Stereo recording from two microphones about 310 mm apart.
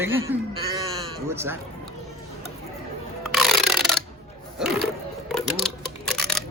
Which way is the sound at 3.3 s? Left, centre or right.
Centre.